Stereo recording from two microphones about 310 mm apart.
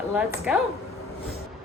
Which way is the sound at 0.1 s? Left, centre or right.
Centre.